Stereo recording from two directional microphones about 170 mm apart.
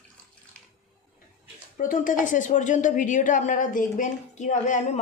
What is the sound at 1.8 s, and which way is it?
A woman's voice, 50° left (ahead or behind).